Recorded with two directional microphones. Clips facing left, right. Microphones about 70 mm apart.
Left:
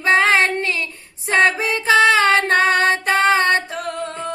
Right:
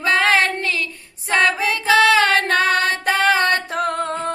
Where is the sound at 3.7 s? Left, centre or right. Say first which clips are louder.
Right 5 dB; right.